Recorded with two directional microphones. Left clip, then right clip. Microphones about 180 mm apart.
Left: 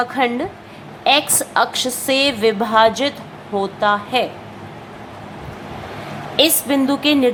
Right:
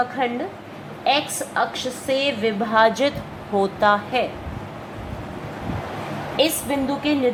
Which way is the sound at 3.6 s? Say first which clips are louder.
Left 1 dB; centre (ahead or behind).